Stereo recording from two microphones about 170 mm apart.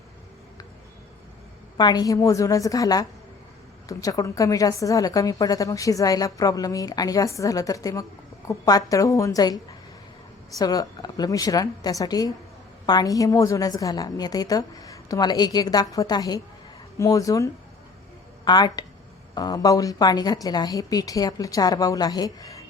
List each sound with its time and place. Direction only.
1.8 s a woman's voice: 25° left (ahead or behind)
10.6 s a woman's voice: 20° left (ahead or behind)